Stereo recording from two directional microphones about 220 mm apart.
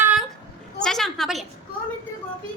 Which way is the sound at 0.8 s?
Centre (ahead or behind).